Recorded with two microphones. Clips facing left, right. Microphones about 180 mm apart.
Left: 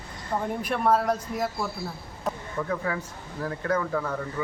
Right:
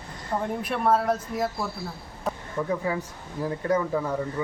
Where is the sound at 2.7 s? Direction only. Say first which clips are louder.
Right 3 dB; 15° right (ahead or behind).